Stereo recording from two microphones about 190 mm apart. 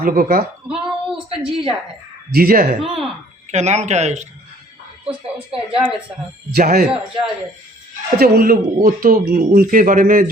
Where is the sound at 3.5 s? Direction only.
35° right (ahead or behind).